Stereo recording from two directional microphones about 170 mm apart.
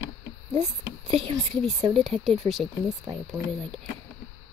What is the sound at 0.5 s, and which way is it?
Speech, 30° right (ahead or behind).